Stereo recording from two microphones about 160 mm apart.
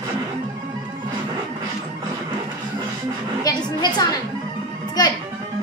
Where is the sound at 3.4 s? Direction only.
25° left (ahead or behind).